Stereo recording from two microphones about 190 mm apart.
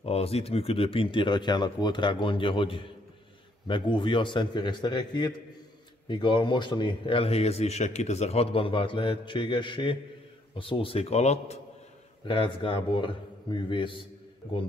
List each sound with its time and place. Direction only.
0.0 s a man's voice: 30° left (ahead or behind)